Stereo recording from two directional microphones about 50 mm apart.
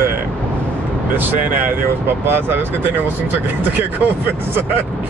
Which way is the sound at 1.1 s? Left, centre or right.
Right.